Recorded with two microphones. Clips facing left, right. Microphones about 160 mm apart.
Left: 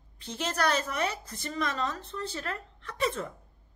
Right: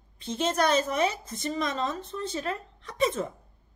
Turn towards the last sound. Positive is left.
turn(degrees=-20)  # may be behind; listen again after turning